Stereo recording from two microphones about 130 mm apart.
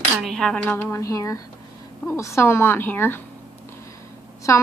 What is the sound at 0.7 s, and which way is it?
A woman's voice, 20° left (ahead or behind).